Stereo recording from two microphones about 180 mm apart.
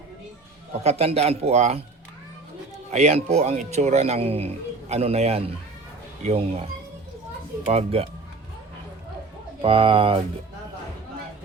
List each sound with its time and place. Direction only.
0.7 s speech: 35° right (ahead or behind)
2.9 s speech: 40° right (ahead or behind)
9.6 s speech: 30° right (ahead or behind)